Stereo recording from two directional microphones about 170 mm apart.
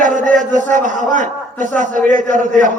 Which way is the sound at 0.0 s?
50° right (ahead or behind).